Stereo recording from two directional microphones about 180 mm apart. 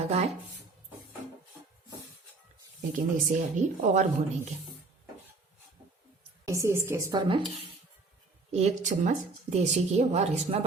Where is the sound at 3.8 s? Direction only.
40° right (ahead or behind).